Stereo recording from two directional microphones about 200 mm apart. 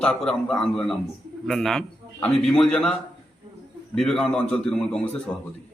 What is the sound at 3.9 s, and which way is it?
A man's voice, 5° left (ahead or behind).